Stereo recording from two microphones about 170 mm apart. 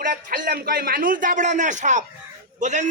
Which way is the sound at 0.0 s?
55° right (ahead or behind).